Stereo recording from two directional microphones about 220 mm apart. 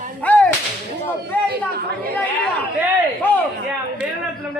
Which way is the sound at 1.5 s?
45° right (ahead or behind).